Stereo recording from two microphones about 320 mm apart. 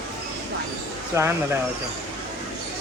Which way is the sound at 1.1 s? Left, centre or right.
Centre.